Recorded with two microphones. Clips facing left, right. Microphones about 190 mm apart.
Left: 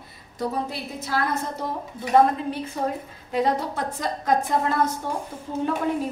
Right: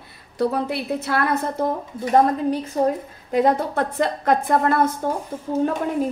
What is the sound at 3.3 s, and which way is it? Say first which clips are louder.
A woman's voice: right 5 dB; 50° right (ahead or behind).